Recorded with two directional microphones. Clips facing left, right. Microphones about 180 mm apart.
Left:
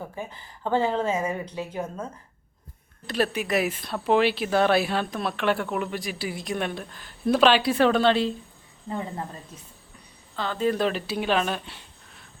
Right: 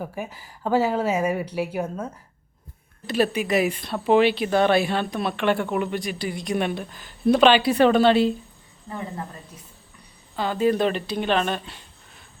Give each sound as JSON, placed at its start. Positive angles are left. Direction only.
{"t": 0.0, "sound": "speech", "side_deg": -10}
{"t": 3.1, "sound": "speech", "side_deg": 0}
{"t": 8.9, "sound": "speech", "side_deg": 25}
{"t": 10.3, "sound": "speech", "side_deg": -10}